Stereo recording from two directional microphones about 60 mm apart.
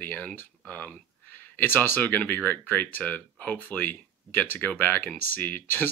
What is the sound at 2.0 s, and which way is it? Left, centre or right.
Speech, left.